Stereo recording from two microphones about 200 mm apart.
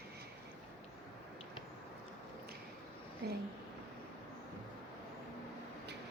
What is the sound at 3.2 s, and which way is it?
Speech, 55° right (ahead or behind).